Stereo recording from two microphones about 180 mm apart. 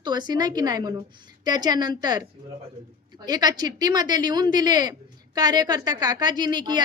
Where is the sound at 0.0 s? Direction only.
25° right (ahead or behind).